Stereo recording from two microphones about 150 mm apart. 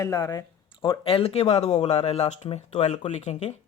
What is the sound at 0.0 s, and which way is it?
Speech, 25° left (ahead or behind).